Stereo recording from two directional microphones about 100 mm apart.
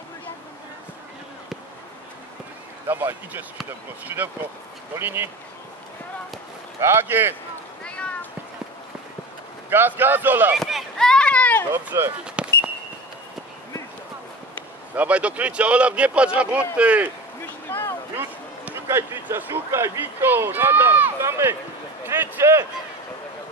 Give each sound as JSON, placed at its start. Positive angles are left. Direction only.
{"t": 2.9, "sound": "speech", "side_deg": -20}
{"t": 6.8, "sound": "speech", "side_deg": -25}
{"t": 7.8, "sound": "cat", "side_deg": 10}
{"t": 9.7, "sound": "speech", "side_deg": -20}
{"t": 10.5, "sound": "run", "side_deg": 0}
{"t": 11.7, "sound": "speech", "side_deg": -25}
{"t": 12.4, "sound": "a sound", "side_deg": -10}
{"t": 15.0, "sound": "speech", "side_deg": -15}
{"t": 17.6, "sound": "a sound", "side_deg": 20}
{"t": 18.1, "sound": "a man's voice", "side_deg": -20}